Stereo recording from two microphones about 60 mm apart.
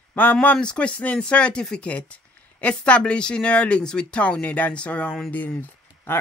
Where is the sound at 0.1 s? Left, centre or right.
Left.